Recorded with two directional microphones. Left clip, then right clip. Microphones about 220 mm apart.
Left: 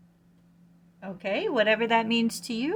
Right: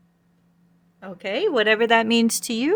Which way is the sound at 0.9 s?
45° right (ahead or behind).